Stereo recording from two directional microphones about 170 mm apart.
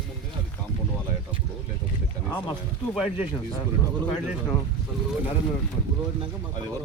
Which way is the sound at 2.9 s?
5° right (ahead or behind).